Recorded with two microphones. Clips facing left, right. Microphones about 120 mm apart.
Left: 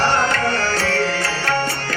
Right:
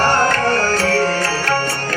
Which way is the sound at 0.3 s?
45° right (ahead or behind).